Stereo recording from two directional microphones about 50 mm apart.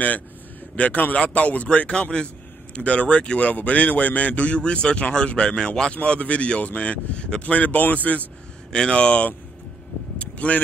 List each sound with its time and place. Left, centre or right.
0.7 s a man's voice: left
7.5 s speech: left
8.7 s a man's voice: centre
10.1 s vehicle: left